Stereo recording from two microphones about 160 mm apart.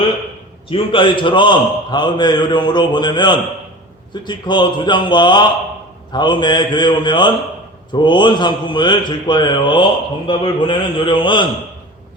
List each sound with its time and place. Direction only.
0.7 s a man's voice: 30° left (ahead or behind)